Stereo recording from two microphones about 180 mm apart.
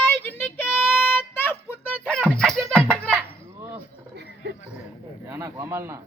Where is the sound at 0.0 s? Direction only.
10° left (ahead or behind).